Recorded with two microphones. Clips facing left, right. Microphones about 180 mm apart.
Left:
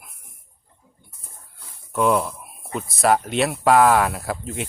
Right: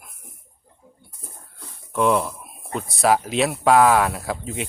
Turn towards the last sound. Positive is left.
turn(degrees=0)  # may be behind; listen again after turning